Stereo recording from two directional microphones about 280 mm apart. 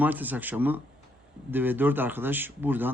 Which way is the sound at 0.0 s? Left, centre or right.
Centre.